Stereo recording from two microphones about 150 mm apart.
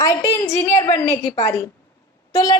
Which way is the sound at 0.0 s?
20° left (ahead or behind).